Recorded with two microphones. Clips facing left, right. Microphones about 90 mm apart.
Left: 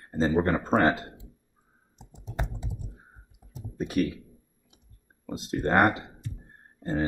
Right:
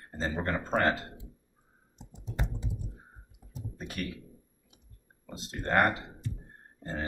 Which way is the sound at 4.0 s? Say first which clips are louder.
Left 11 dB; 15° left (ahead or behind).